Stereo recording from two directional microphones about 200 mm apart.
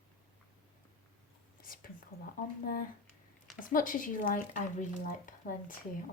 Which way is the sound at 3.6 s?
40° left (ahead or behind).